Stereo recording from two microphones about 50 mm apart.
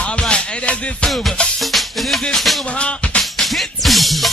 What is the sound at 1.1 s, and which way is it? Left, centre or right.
Music, centre.